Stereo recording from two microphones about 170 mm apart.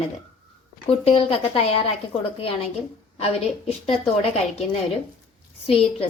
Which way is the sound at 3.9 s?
40° left (ahead or behind).